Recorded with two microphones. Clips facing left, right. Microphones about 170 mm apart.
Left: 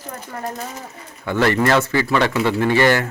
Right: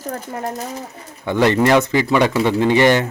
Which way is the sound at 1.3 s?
20° right (ahead or behind).